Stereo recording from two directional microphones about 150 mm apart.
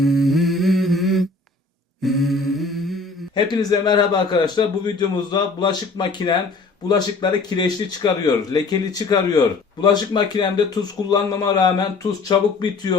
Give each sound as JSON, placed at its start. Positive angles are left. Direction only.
{"t": 0.0, "sound": "humming", "side_deg": 0}
{"t": 2.0, "sound": "mantra", "side_deg": 0}
{"t": 3.3, "sound": "a man's voice", "side_deg": 30}